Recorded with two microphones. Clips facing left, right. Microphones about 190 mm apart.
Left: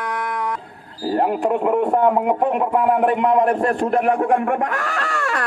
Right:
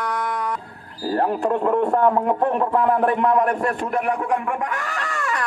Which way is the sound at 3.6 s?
45° left (ahead or behind).